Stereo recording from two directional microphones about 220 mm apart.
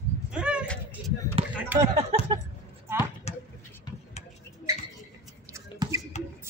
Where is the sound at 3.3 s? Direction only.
30° left (ahead or behind).